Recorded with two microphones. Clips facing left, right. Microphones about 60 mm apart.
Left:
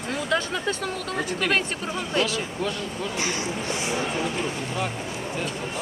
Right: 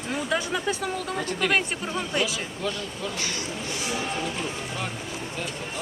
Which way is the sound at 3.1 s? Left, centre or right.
Left.